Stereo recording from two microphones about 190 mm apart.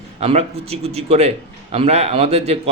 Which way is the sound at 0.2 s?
35° right (ahead or behind).